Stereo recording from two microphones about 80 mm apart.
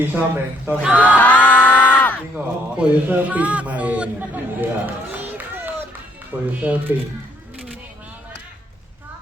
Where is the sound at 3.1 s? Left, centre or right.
Centre.